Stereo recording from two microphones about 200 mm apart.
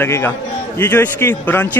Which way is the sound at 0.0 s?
10° left (ahead or behind).